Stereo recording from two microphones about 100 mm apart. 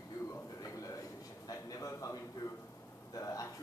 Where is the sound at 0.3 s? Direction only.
35° left (ahead or behind).